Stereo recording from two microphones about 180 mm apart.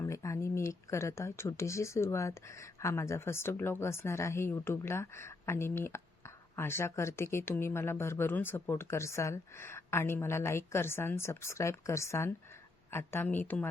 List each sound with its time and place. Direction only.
0.0 s speech: 15° left (ahead or behind)